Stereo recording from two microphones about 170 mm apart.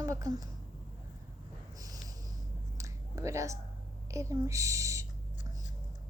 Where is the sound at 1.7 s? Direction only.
20° right (ahead or behind).